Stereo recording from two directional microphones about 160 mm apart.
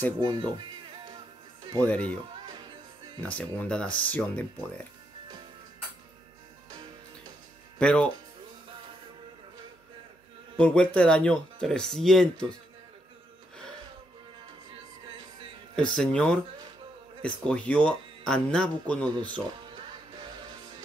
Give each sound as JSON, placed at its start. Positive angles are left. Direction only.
{"t": 0.2, "sound": "speech", "side_deg": -25}
{"t": 1.8, "sound": "speech", "side_deg": 10}
{"t": 3.2, "sound": "speech", "side_deg": 10}
{"t": 7.8, "sound": "speech", "side_deg": 5}
{"t": 10.6, "sound": "speech", "side_deg": 5}
{"t": 15.7, "sound": "speech", "side_deg": 5}